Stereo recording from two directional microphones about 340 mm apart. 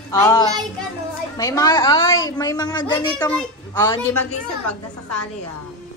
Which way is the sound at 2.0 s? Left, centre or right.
Left.